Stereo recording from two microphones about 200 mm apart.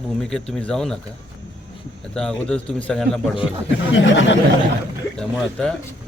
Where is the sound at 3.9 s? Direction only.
70° left (ahead or behind).